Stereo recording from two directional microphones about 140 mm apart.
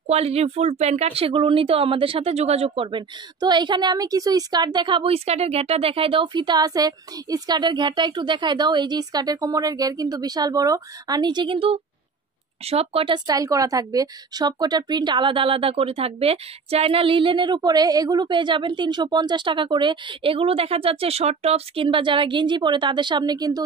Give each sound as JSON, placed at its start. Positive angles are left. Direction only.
{"t": 0.0, "sound": "speech", "side_deg": -50}
{"t": 13.3, "sound": "speech", "side_deg": -25}